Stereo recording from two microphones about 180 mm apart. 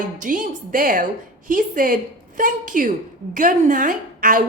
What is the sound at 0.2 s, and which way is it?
A woman's voice, 50° right (ahead or behind).